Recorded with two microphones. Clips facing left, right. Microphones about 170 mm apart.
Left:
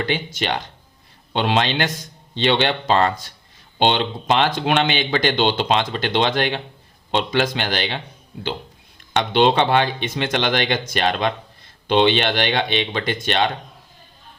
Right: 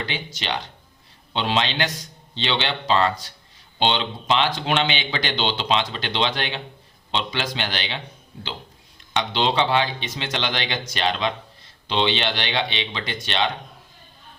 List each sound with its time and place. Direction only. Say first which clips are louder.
0.0 s speech: left 7 dB; 50° left (ahead or behind)
9.1 s speech: left 5 dB; 55° left (ahead or behind)